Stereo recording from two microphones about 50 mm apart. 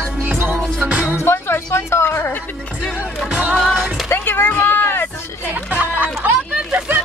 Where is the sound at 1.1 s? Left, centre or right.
Left.